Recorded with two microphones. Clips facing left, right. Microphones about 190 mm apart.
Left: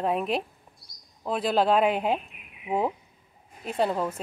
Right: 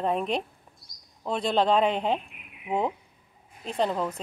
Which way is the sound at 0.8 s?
45° right (ahead or behind).